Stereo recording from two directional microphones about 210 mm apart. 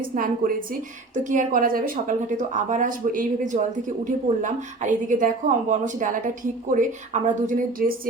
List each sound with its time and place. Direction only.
0.0 s a woman's voice: 40° right (ahead or behind)